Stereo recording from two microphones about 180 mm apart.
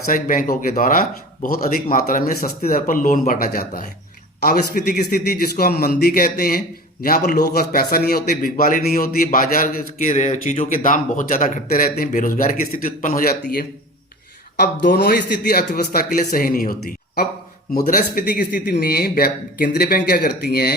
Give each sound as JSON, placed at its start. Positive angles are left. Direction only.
{"t": 0.0, "sound": "a man's voice", "side_deg": 50}
{"t": 17.8, "sound": "speech", "side_deg": 50}